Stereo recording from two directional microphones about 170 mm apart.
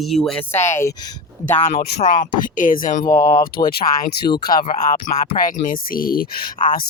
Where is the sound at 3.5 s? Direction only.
60° left (ahead or behind).